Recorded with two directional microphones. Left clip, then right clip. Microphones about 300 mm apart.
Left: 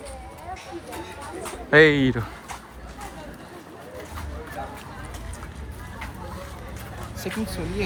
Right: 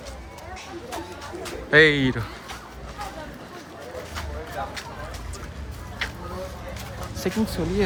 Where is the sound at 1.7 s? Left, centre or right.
Centre.